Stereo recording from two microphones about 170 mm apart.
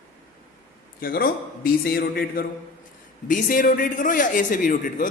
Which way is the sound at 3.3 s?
50° left (ahead or behind).